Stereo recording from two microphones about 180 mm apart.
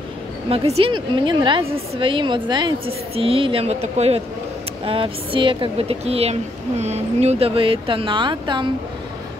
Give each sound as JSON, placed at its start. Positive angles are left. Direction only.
{"t": 0.5, "sound": "a woman's voice", "side_deg": -35}